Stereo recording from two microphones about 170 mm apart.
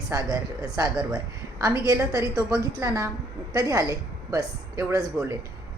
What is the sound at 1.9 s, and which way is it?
A woman's voice, 15° right (ahead or behind).